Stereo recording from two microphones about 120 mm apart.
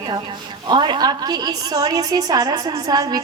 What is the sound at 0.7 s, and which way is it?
A woman's voice, 40° right (ahead or behind).